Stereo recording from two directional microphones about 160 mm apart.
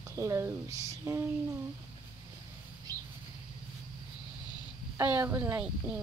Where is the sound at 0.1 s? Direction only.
15° right (ahead or behind).